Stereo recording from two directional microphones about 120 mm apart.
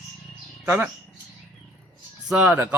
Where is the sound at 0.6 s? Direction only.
15° right (ahead or behind).